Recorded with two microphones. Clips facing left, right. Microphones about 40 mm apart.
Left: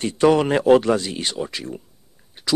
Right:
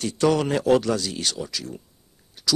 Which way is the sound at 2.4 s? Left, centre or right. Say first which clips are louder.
Right 2 dB; left.